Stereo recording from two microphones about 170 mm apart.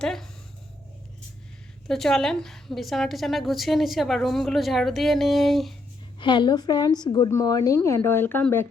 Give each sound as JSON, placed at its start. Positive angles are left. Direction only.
{"t": 0.0, "sound": "a woman's voice", "side_deg": 0}
{"t": 1.9, "sound": "a woman's voice", "side_deg": 0}
{"t": 6.1, "sound": "a woman's voice", "side_deg": 25}